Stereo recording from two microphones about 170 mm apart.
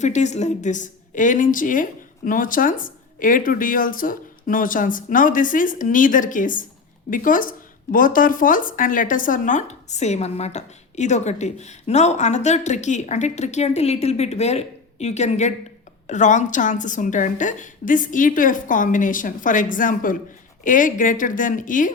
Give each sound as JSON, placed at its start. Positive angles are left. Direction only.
{"t": 0.0, "sound": "speech", "side_deg": 45}